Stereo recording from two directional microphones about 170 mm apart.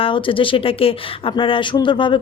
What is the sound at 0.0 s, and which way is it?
Speech, 30° left (ahead or behind).